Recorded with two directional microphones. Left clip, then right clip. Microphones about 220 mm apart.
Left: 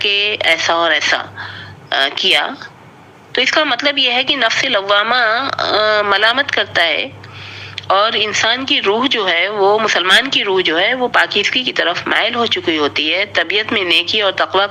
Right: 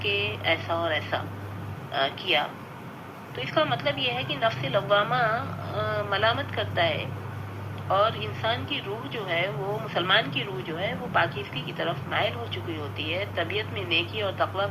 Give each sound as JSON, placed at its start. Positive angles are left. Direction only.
{"t": 0.0, "sound": "speech", "side_deg": 50}